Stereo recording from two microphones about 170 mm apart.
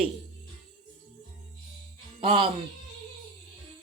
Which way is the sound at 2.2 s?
30° right (ahead or behind).